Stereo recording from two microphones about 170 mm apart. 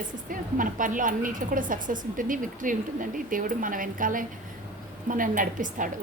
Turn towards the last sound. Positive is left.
turn(degrees=-50)  # may be behind; listen again after turning